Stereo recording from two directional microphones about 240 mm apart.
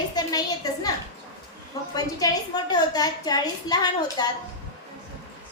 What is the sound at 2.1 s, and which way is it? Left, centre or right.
A child's voice, centre.